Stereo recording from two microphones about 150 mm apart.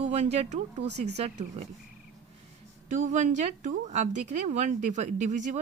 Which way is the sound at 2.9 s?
55° right (ahead or behind).